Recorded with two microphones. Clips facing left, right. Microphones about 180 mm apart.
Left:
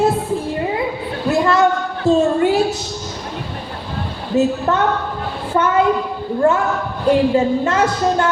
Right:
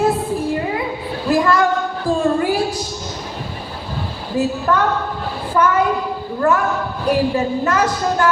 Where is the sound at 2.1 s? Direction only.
25° left (ahead or behind).